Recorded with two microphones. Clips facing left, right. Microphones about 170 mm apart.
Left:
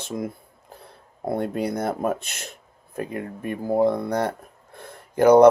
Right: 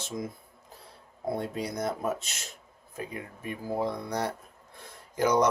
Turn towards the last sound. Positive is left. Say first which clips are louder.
# left 11 dB
turn(degrees=60)  # may be behind; listen again after turning